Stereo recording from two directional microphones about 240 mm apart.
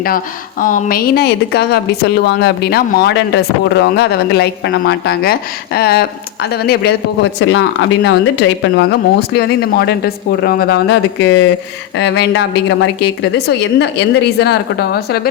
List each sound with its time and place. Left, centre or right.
0.6 s a woman's voice: left